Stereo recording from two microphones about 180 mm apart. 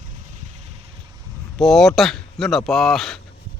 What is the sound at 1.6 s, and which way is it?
Speech, centre (ahead or behind).